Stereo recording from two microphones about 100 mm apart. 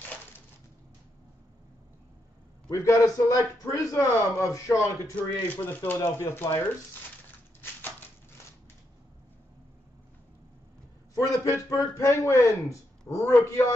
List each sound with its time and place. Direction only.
2.7 s a man's voice: 30° left (ahead or behind)
5.6 s speech: 20° left (ahead or behind)
11.1 s a sound: 35° left (ahead or behind)
11.7 s speech: 30° left (ahead or behind)